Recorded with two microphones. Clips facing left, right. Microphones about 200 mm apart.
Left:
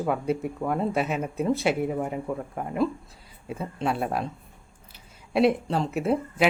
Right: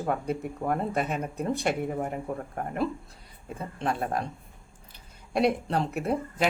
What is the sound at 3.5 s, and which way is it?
Speech, 5° left (ahead or behind).